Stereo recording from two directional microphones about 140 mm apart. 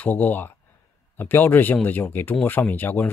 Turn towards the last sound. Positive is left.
turn(degrees=15)  # may be behind; listen again after turning